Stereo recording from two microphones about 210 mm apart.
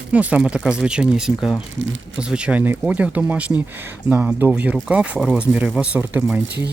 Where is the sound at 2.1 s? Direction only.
5° right (ahead or behind).